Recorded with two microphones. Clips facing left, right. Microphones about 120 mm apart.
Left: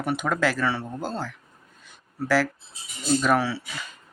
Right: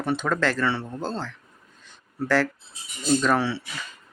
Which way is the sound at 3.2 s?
5° left (ahead or behind).